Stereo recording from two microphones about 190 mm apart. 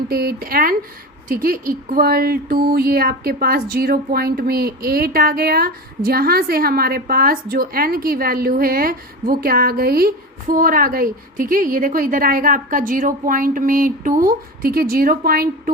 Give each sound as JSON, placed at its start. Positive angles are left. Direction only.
{"t": 0.1, "sound": "speech", "side_deg": -55}